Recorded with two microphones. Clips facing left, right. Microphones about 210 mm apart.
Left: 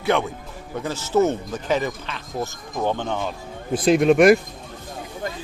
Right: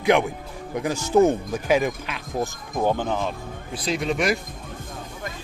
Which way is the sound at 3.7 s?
50° left (ahead or behind).